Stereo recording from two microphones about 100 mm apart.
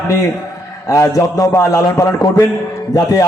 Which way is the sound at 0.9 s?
30° left (ahead or behind).